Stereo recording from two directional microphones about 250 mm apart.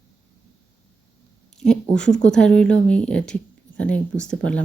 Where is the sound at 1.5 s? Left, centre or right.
Centre.